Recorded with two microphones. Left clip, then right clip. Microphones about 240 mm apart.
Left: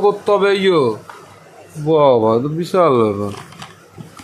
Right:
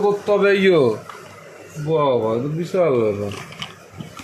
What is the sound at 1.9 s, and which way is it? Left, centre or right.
Speech, left.